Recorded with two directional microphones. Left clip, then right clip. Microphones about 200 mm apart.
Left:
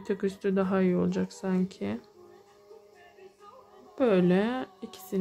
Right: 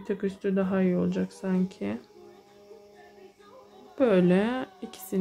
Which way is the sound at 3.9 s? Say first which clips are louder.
Right 2 dB; 10° left (ahead or behind).